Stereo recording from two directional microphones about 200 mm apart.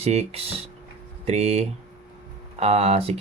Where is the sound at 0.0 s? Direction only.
30° right (ahead or behind).